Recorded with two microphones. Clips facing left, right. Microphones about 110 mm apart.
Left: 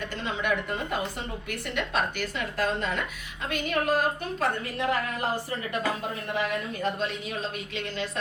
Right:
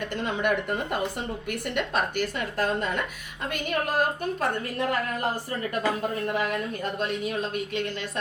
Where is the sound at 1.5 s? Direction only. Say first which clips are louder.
Right 3 dB; 50° right (ahead or behind).